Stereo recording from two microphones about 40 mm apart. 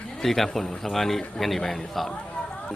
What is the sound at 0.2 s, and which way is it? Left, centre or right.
Speech, centre.